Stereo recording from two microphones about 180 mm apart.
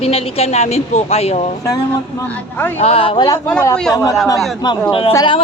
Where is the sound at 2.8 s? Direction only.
30° left (ahead or behind).